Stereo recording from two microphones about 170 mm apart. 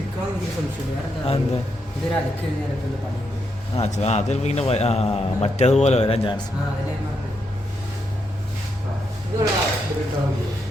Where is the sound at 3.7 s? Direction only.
40° left (ahead or behind).